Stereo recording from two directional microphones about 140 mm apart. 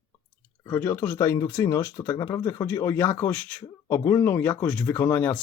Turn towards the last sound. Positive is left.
turn(degrees=15)  # may be behind; listen again after turning